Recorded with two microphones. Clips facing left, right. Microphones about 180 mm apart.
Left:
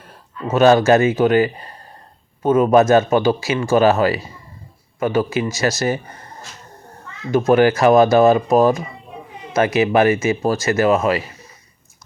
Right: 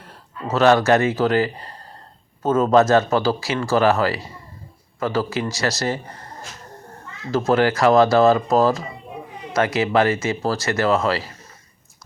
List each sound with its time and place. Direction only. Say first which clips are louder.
0.5 s speech: left 3 dB; 20° left (ahead or behind)
7.3 s speech: left 4 dB; 20° left (ahead or behind)